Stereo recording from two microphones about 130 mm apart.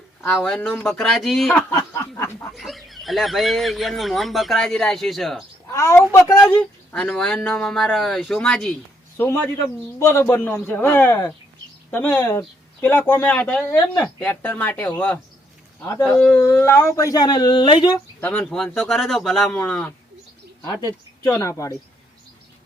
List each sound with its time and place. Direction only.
0.3 s speech: 5° left (ahead or behind)
1.7 s a sound: 25° left (ahead or behind)
2.6 s speech: centre (ahead or behind)
5.7 s speech: 20° left (ahead or behind)
6.4 s speech: 5° left (ahead or behind)
9.1 s speech: 15° left (ahead or behind)
15.8 s a sound: 20° left (ahead or behind)
16.0 s speech: 10° left (ahead or behind)
16.4 s speech: 20° left (ahead or behind)
18.2 s speech: 10° left (ahead or behind)
20.8 s speech: 25° left (ahead or behind)